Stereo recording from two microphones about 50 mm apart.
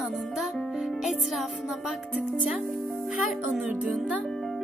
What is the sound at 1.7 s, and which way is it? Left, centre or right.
Music, centre.